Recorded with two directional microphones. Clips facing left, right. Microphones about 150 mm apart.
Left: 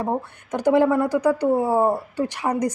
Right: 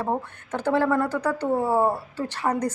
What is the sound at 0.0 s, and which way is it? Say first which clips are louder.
A woman's voice: left 2 dB; 15° left (ahead or behind).